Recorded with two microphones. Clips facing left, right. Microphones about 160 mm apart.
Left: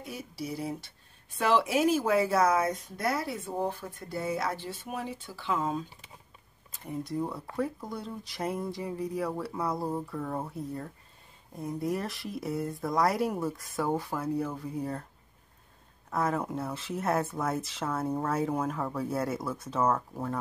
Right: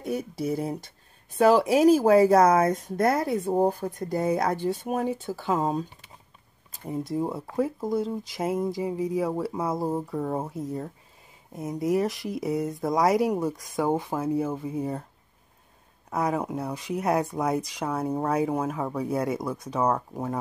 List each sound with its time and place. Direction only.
0.0 s speech: 50° right (ahead or behind)
7.2 s speech: 25° right (ahead or behind)
16.1 s speech: 15° right (ahead or behind)